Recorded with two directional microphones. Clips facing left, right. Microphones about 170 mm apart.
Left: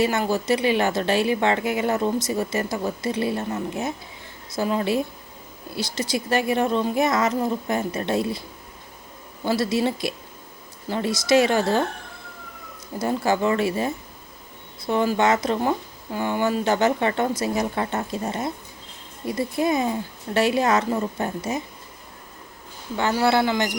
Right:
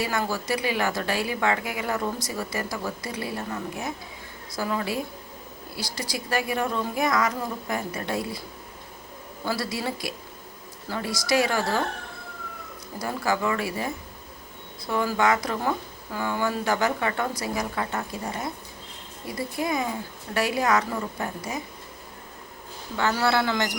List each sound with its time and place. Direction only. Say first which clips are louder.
0.0 s a woman's voice: left 6 dB; 25° left (ahead or behind)
9.5 s a woman's voice: left 7 dB; 25° left (ahead or behind)
13.0 s a woman's voice: left 5 dB; 25° left (ahead or behind)
19.5 s a woman's voice: left 5 dB; 25° left (ahead or behind)
23.0 s a woman's voice: left 3 dB; 20° left (ahead or behind)